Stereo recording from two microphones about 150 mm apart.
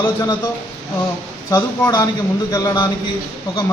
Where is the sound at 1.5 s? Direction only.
25° left (ahead or behind).